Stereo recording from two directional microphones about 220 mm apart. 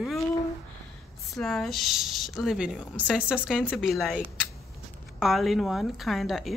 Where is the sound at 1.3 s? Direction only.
Centre (ahead or behind).